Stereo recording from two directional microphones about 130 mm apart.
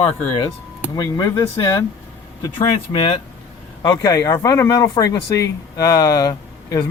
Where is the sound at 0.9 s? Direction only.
30° left (ahead or behind).